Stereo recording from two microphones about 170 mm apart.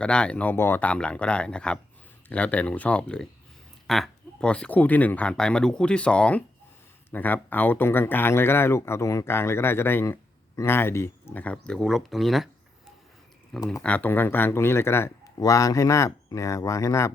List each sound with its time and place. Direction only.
0.0 s speech: 5° left (ahead or behind)
13.8 s speech: 10° left (ahead or behind)